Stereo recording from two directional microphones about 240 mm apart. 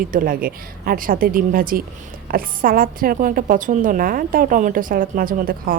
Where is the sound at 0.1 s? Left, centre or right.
Right.